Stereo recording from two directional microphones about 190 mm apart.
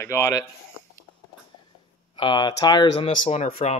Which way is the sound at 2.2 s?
25° left (ahead or behind).